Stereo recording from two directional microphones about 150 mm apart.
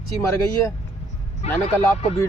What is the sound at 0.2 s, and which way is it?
Speech, 20° left (ahead or behind).